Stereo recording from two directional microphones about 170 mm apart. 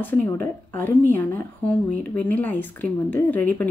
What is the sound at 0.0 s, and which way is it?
Speech, 10° left (ahead or behind).